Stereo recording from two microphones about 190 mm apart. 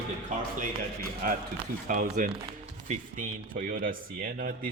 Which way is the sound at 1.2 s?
50° right (ahead or behind).